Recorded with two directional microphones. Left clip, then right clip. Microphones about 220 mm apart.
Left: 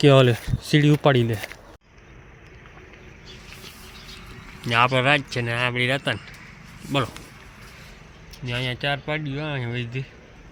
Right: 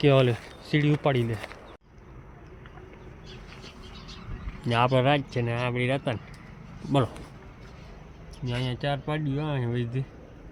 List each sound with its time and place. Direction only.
0.0 s speech: 20° left (ahead or behind)
4.6 s speech: 10° right (ahead or behind)
6.9 s speech: 15° right (ahead or behind)
8.4 s speech: centre (ahead or behind)